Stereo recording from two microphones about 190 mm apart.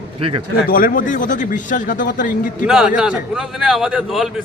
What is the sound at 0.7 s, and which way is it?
A man's voice, 45° left (ahead or behind).